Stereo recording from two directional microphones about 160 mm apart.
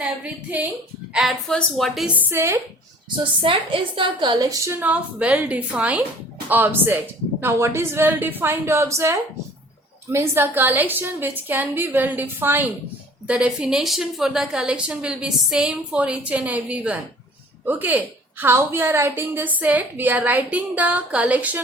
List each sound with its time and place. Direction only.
0.0 s a woman's voice: 10° right (ahead or behind)
3.4 s a woman's voice: 35° right (ahead or behind); by 21.6 s 10° right (ahead or behind)